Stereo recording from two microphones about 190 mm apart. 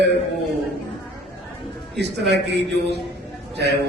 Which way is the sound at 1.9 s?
65° right (ahead or behind).